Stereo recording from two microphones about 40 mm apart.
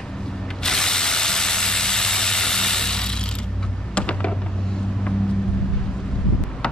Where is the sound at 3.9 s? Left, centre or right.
Left.